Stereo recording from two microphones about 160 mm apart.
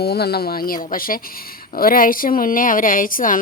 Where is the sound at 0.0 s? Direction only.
85° left.